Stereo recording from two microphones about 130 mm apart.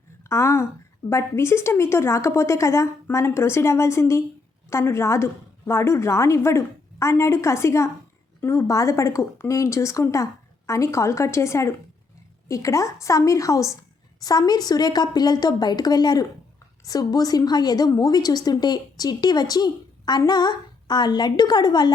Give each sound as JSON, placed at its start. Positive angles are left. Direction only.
{"t": 0.3, "sound": "a woman's voice", "side_deg": 20}